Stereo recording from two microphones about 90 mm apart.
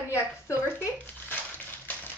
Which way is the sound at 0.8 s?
20° left (ahead or behind).